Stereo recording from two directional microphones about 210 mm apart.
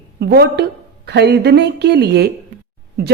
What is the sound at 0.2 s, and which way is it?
A woman's voice, 50° right (ahead or behind).